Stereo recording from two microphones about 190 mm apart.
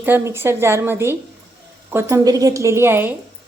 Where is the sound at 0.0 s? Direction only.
10° right (ahead or behind).